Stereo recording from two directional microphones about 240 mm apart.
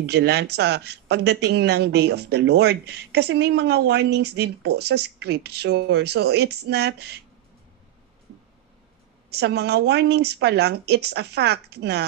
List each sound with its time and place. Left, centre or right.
0.0 s speech: right
9.3 s speech: right